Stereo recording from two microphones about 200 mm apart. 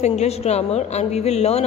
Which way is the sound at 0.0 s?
35° left (ahead or behind).